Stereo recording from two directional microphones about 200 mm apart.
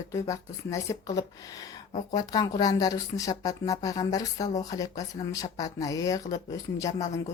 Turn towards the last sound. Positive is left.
turn(degrees=15)  # may be behind; listen again after turning